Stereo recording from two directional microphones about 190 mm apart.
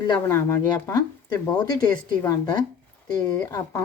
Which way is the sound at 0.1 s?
15° left (ahead or behind).